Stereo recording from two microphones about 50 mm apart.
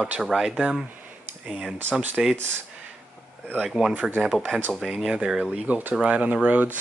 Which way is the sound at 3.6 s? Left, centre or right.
Centre.